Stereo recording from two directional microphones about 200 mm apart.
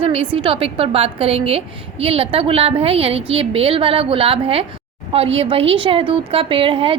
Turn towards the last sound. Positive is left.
turn(degrees=-25)  # may be behind; listen again after turning